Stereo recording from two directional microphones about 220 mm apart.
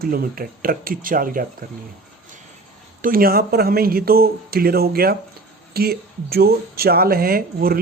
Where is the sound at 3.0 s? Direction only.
40° right (ahead or behind).